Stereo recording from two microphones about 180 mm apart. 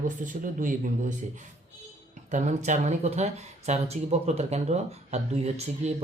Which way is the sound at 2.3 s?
40° right (ahead or behind).